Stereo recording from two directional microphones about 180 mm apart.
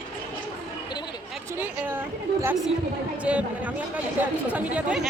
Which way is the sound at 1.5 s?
10° right (ahead or behind).